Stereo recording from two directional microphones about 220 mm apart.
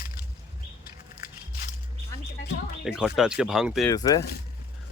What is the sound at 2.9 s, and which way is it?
Speech, 5° right (ahead or behind).